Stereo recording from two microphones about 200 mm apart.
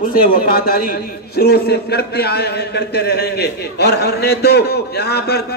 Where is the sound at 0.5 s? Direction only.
50° left (ahead or behind).